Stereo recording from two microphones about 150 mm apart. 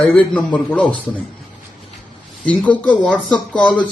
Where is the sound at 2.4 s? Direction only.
10° left (ahead or behind).